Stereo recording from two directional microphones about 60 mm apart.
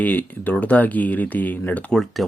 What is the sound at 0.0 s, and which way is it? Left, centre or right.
Speech, left.